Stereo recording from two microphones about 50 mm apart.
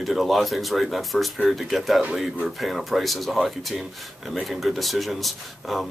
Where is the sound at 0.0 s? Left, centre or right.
Centre.